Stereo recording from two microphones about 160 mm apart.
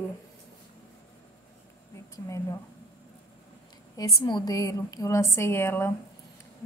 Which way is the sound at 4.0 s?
25° left (ahead or behind).